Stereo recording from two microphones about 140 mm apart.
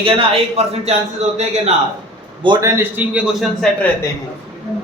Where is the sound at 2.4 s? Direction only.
30° right (ahead or behind).